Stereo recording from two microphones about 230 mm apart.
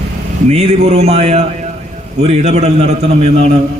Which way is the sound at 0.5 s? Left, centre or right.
Right.